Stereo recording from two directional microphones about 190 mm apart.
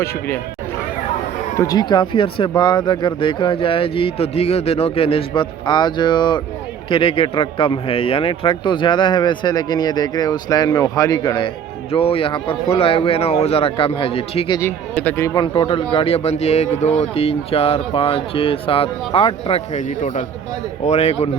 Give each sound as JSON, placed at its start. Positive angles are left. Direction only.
{"t": 1.5, "sound": "a man's voice", "side_deg": 20}
{"t": 14.6, "sound": "a man's voice", "side_deg": 10}